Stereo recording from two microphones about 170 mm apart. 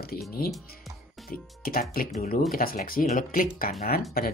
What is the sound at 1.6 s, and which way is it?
Speech, 60° left (ahead or behind).